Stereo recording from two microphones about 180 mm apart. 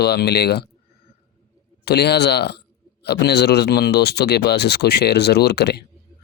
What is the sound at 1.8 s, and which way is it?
Speech, 65° left (ahead or behind).